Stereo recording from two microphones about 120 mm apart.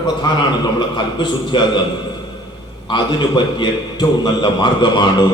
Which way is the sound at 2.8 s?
40° left (ahead or behind).